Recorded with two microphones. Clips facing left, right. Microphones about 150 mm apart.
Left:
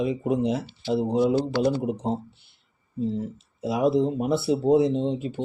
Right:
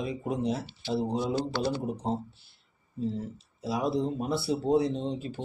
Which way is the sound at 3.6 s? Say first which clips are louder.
Left 7 dB; 20° left (ahead or behind).